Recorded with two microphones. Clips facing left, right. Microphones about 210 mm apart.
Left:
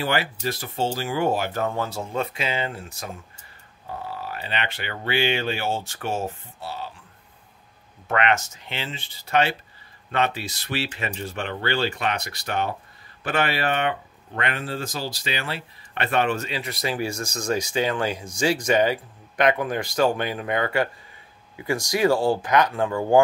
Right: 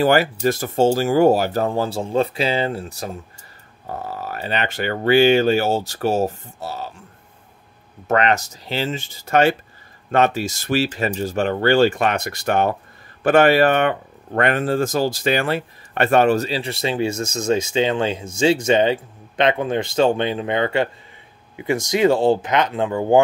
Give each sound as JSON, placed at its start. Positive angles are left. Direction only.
{"t": 0.0, "sound": "speech", "side_deg": -45}
{"t": 8.1, "sound": "speech", "side_deg": -35}